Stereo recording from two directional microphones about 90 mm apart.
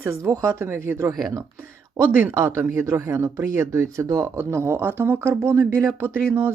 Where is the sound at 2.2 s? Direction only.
30° right (ahead or behind).